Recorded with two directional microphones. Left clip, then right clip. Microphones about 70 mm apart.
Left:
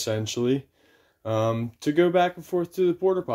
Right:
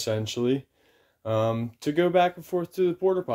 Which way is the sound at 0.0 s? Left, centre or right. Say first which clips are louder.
Left 1 dB; centre.